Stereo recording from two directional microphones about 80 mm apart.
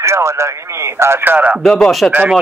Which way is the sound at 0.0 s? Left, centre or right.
Right.